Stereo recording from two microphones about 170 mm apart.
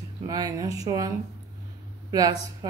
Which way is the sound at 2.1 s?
20° right (ahead or behind).